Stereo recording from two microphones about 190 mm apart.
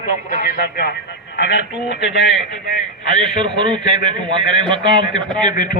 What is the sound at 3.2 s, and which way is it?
A man's voice, 25° right (ahead or behind).